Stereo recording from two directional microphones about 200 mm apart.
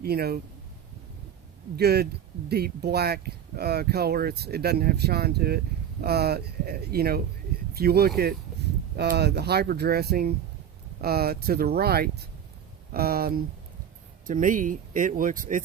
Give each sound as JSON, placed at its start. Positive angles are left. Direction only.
{"t": 0.0, "sound": "speech", "side_deg": -50}
{"t": 1.7, "sound": "speech", "side_deg": -55}